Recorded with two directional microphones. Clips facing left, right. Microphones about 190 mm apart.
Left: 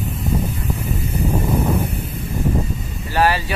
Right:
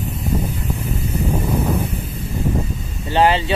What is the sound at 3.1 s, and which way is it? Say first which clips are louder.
Speech: right 3 dB; 20° right (ahead or behind).